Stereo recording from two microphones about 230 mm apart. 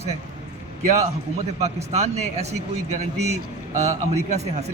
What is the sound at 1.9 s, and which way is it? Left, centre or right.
Speech, right.